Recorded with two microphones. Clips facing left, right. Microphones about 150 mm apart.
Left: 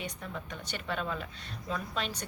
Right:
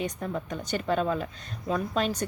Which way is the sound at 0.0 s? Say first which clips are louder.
Right 8 dB; 45° right (ahead or behind).